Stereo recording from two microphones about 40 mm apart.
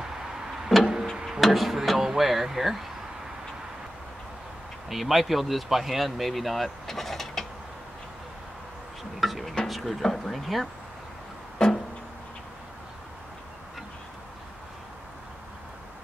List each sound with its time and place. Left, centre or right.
0.0 s a sound: centre
1.4 s speech: centre
4.8 s speech: centre
9.2 s a sound: centre
9.7 s speech: centre
11.5 s music: centre